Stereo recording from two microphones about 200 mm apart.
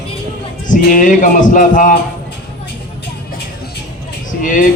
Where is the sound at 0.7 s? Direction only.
40° left (ahead or behind).